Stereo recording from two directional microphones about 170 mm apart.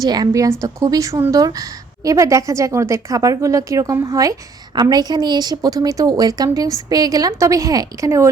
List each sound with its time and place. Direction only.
0.0 s a woman's voice: 20° right (ahead or behind)